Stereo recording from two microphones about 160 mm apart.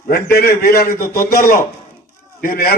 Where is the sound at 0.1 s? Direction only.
70° left (ahead or behind).